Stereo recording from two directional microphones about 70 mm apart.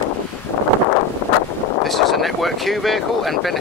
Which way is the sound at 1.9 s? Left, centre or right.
Centre.